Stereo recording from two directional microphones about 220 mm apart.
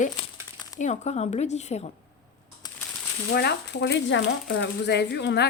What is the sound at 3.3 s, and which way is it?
Speech, 50° left (ahead or behind).